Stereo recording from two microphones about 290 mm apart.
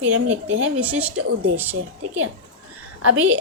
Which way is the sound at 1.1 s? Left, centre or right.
Right.